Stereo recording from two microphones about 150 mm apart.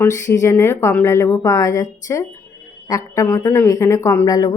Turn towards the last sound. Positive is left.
turn(degrees=25)  # may be behind; listen again after turning